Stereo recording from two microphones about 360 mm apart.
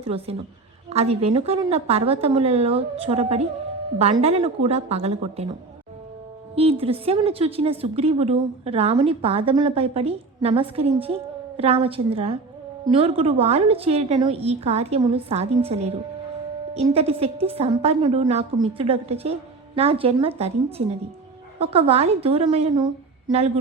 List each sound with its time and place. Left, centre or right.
0.0 s a woman's voice: centre
6.6 s a woman's voice: centre